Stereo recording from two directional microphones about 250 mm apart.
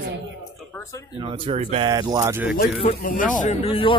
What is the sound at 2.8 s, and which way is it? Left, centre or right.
Speech, left.